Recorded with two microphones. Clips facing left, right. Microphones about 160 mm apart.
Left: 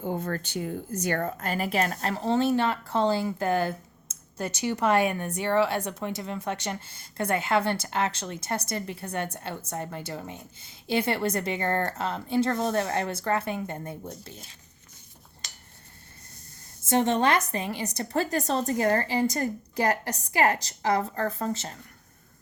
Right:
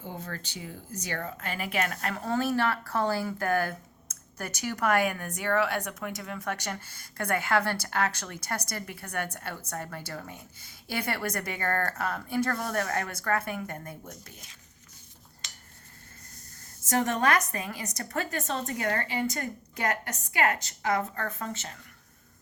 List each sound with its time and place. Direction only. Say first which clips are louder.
0.0 s a woman's voice: left 9 dB; 50° left (ahead or behind); by 14.5 s 30° left (ahead or behind)
15.4 s a sound: left 2 dB; 35° left (ahead or behind)
16.9 s a woman's voice: left 3 dB; 25° left (ahead or behind)